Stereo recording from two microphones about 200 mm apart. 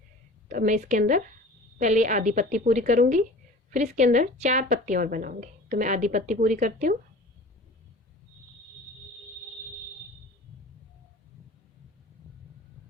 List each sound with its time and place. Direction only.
0.4 s speech: 40° right (ahead or behind)